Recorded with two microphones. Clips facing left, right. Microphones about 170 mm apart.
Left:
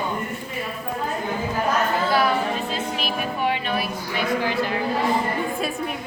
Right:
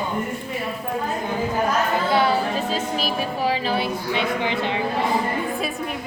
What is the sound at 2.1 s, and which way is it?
A woman's voice, 30° right (ahead or behind).